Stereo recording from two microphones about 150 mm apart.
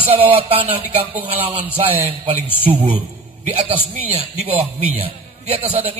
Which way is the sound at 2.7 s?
35° right (ahead or behind).